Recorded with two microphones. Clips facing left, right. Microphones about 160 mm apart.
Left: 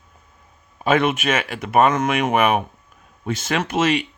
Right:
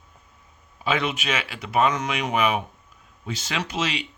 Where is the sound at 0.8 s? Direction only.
50° left (ahead or behind).